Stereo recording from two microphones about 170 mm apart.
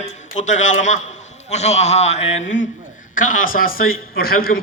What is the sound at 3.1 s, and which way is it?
A man's voice, 50° left (ahead or behind).